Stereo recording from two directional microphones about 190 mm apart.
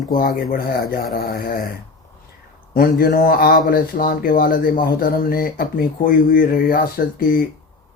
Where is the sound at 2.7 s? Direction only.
50° left (ahead or behind).